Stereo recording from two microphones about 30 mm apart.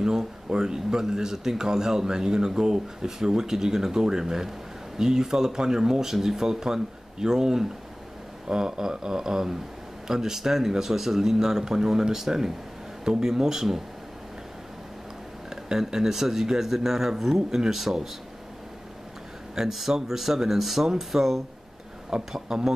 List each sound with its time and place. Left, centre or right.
0.0 s speech: right
15.5 s speech: centre
19.5 s speech: centre